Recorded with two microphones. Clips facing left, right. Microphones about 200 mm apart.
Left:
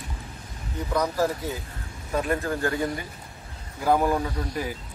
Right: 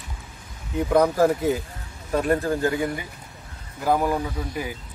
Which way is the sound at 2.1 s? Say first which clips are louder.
Right 4 dB; 45° right (ahead or behind).